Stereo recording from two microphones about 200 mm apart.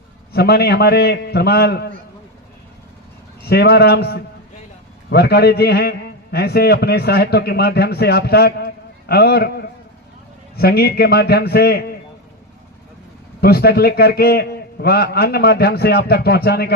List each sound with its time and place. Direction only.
0.3 s a man's voice: 50° left (ahead or behind)
3.4 s a man's voice: 55° left (ahead or behind)
13.4 s a man's voice: 50° left (ahead or behind)